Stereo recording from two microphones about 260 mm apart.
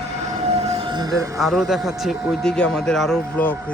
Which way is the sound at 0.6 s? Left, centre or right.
Right.